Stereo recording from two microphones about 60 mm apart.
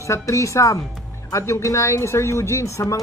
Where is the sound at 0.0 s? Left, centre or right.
Left.